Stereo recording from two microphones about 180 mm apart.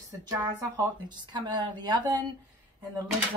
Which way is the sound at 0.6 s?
25° right (ahead or behind).